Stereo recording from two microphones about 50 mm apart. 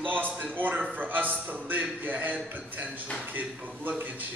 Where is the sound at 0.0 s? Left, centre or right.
Right.